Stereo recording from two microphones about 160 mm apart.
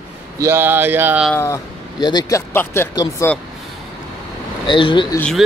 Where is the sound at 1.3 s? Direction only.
20° left (ahead or behind).